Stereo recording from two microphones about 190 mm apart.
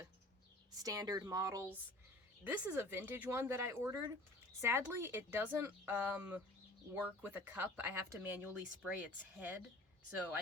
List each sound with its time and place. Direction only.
0.8 s speech: 20° right (ahead or behind)